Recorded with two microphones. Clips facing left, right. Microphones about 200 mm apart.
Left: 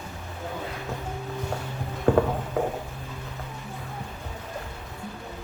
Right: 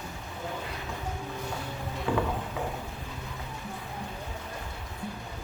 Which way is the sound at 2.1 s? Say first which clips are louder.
Left 8 dB; 45° left (ahead or behind).